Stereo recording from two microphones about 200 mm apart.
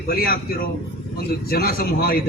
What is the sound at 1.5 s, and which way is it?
Speech, 50° left (ahead or behind).